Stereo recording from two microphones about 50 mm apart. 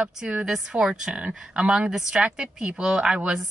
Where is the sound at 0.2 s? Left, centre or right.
Right.